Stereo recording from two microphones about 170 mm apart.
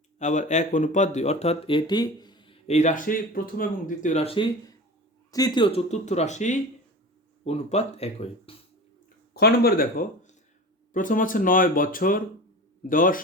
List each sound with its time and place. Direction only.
0.2 s speech: 45° left (ahead or behind)
5.3 s speech: 25° left (ahead or behind)
9.3 s speech: 70° left (ahead or behind); by 13.2 s 55° left (ahead or behind)